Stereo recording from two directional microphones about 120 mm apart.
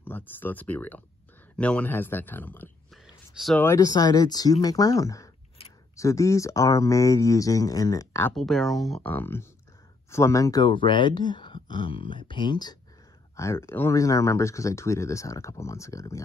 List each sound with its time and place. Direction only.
0.0 s speech: 15° left (ahead or behind)
2.9 s whispering: centre (ahead or behind)
3.5 s speech: 20° left (ahead or behind)
3.8 s speech: 35° left (ahead or behind)
8.4 s speech: centre (ahead or behind)
9.0 s speech: 15° left (ahead or behind)
10.6 s speech: 45° left (ahead or behind)
13.4 s speech: 25° left (ahead or behind)